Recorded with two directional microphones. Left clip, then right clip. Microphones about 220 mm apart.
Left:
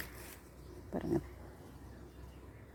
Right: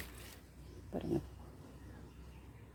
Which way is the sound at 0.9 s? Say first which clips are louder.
Left 2 dB; 5° left (ahead or behind).